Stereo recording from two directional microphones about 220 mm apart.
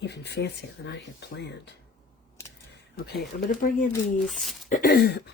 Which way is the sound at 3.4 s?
40° left (ahead or behind).